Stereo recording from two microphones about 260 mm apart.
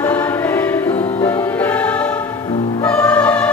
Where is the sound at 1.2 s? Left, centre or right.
Centre.